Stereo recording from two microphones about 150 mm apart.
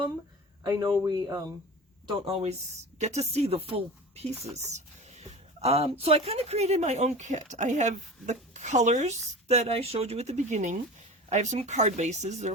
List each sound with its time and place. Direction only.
0.6 s speech: 25° right (ahead or behind)
2.0 s speech: 35° right (ahead or behind)